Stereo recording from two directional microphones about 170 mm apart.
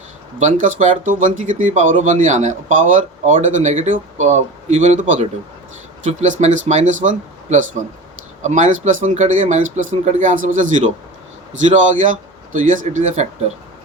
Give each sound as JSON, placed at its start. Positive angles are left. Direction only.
{"t": 0.3, "sound": "speech", "side_deg": -45}